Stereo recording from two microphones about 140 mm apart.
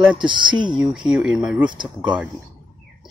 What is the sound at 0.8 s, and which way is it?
Speech, 5° right (ahead or behind).